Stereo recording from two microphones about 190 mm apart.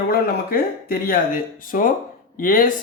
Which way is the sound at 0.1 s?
50° left (ahead or behind).